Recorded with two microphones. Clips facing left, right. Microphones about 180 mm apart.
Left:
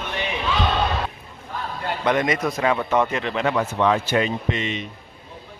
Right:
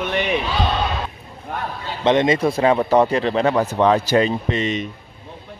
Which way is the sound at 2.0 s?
25° right (ahead or behind).